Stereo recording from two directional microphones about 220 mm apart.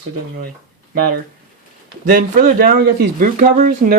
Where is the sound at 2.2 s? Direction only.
40° right (ahead or behind).